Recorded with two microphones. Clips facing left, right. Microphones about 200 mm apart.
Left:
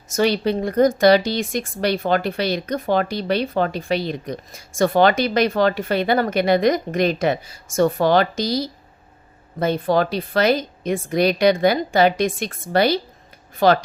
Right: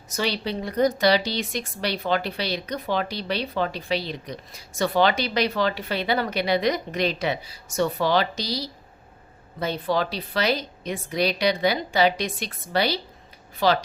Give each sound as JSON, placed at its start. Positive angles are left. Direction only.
{"t": 0.1, "sound": "speech", "side_deg": 50}